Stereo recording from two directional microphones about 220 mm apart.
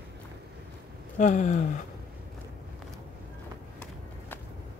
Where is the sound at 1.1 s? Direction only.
35° left (ahead or behind).